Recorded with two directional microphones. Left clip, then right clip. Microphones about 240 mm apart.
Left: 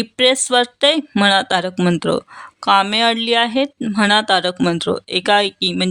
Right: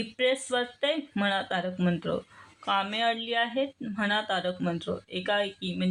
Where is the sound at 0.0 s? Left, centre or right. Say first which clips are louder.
Left 12 dB; left.